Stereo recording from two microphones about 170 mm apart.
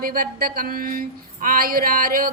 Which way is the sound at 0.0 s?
60° right (ahead or behind).